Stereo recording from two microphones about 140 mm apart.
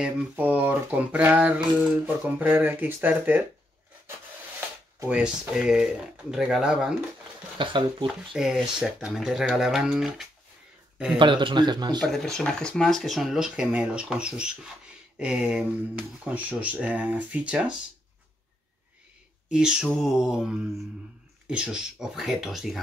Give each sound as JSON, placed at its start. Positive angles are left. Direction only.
{"t": 0.0, "sound": "speech", "side_deg": -10}
{"t": 5.1, "sound": "speech", "side_deg": -5}
{"t": 7.5, "sound": "speech", "side_deg": -35}
{"t": 8.1, "sound": "speech", "side_deg": -5}
{"t": 11.1, "sound": "speech", "side_deg": -35}
{"t": 12.1, "sound": "speech", "side_deg": 5}
{"t": 19.5, "sound": "speech", "side_deg": -5}